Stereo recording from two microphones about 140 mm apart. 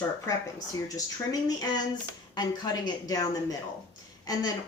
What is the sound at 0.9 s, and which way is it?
Speech, 25° left (ahead or behind).